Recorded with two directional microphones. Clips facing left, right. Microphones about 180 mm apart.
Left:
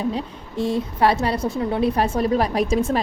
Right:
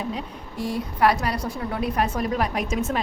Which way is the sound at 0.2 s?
25° left (ahead or behind).